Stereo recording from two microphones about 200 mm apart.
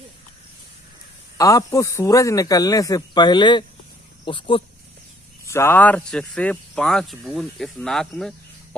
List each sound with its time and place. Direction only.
1.4 s a man's voice: 15° left (ahead or behind)
5.4 s speech: 15° left (ahead or behind)